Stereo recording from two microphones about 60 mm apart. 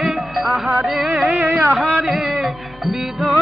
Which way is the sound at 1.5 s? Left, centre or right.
Right.